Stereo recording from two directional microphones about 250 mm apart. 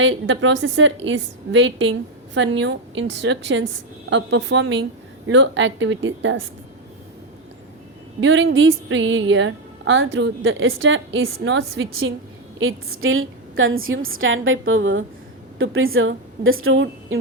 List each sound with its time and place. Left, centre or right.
0.0 s speech: right
8.2 s a woman's voice: right